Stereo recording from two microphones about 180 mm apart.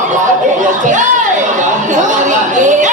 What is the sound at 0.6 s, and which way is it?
Chatter, 45° right (ahead or behind).